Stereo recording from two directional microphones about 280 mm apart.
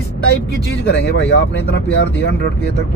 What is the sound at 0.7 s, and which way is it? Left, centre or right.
Speech, left.